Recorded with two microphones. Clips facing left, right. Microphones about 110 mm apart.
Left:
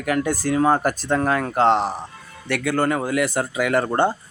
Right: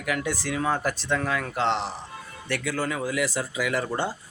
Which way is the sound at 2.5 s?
60° left (ahead or behind).